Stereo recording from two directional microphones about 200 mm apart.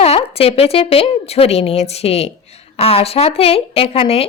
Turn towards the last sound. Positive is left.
turn(degrees=30)  # may be behind; listen again after turning